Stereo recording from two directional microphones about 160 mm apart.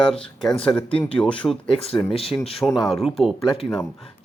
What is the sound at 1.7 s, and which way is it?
Speech, 40° left (ahead or behind).